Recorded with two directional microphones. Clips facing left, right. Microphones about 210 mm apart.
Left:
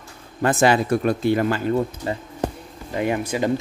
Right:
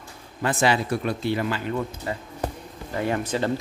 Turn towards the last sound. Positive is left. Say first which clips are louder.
# left 3 dB
turn(degrees=10)  # may be behind; listen again after turning